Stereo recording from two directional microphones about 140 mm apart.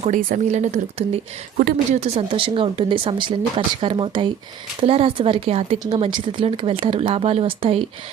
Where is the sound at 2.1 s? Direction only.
40° right (ahead or behind).